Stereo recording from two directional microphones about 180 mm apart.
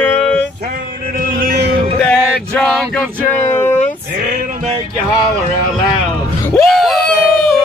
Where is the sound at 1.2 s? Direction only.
55° right (ahead or behind).